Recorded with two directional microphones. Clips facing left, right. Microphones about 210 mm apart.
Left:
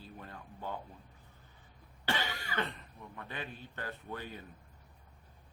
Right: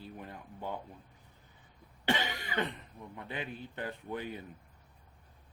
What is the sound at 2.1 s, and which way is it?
Cough, 20° right (ahead or behind).